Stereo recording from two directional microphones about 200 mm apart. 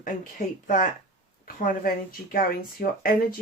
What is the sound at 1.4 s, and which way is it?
Speech, 45° left (ahead or behind).